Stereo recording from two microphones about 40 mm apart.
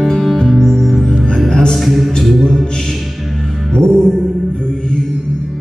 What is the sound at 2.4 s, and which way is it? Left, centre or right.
Music, centre.